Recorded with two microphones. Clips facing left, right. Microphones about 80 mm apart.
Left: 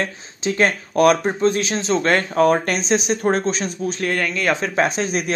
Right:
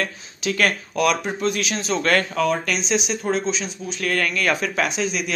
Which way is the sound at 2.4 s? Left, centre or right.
Left.